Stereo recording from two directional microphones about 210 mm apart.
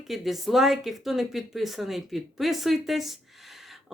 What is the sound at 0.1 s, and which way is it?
Speech, centre (ahead or behind).